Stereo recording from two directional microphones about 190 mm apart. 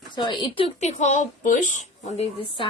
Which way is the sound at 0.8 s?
40° left (ahead or behind).